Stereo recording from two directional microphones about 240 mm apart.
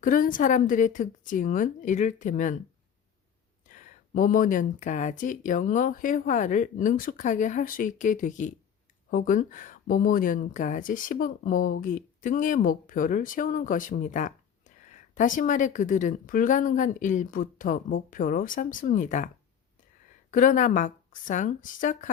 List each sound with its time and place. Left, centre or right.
0.0 s speech: left
3.8 s speech: left
20.3 s speech: left